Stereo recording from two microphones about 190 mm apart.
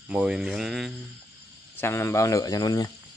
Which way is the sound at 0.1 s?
5° right (ahead or behind).